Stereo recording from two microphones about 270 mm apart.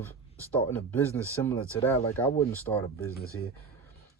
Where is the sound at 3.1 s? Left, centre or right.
Left.